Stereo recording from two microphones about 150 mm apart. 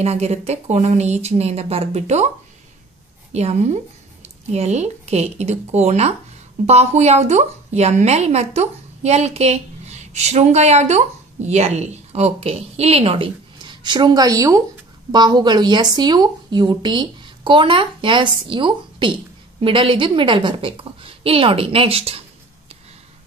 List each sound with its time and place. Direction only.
0.0 s speech: 45° right (ahead or behind)
3.3 s a woman's voice: 45° right (ahead or behind)